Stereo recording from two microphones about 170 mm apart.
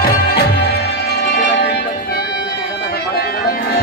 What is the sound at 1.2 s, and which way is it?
Music, 80° left.